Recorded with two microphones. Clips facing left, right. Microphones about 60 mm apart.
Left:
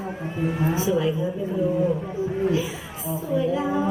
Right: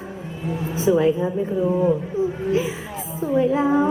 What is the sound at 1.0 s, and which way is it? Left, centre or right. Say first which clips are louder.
Speech: right 5 dB; right.